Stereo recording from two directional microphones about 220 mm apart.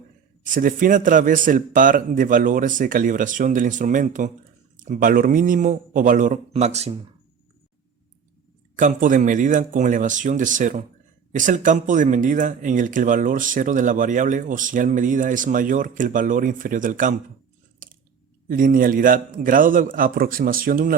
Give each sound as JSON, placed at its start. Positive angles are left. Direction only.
{"t": 0.4, "sound": "speech", "side_deg": -40}
{"t": 8.7, "sound": "speech", "side_deg": -35}
{"t": 17.8, "sound": "chewing", "side_deg": -40}
{"t": 18.4, "sound": "speech", "side_deg": -40}